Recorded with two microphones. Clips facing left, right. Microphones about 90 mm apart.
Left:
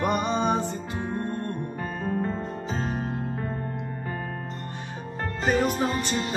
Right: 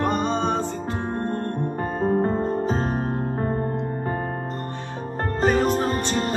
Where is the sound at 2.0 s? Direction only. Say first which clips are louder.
Right 8 dB; 35° right (ahead or behind).